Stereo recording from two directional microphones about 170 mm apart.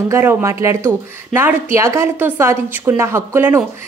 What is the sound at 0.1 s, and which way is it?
Speech, 15° right (ahead or behind).